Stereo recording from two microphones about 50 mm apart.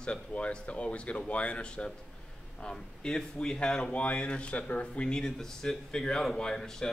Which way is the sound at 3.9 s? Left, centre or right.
Left.